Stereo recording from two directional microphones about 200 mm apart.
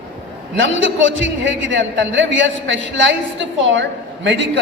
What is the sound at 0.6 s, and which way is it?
A man's voice, 70° right (ahead or behind).